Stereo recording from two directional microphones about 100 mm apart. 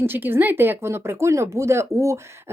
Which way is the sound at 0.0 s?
20° right (ahead or behind).